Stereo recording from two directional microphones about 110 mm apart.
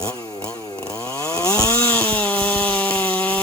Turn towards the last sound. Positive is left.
turn(degrees=15)  # may be behind; listen again after turning